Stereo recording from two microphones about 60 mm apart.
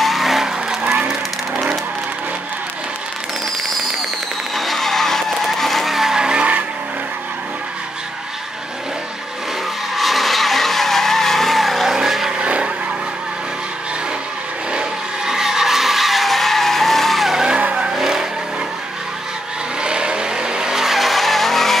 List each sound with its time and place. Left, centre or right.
0.0 s vehicle: centre
4.6 s vehicle: centre; by 6.6 s right
9.9 s vehicle: centre
14.7 s vehicle: centre
17.6 s vehicle: centre
17.9 s vehicle: centre
19.8 s vehicle: centre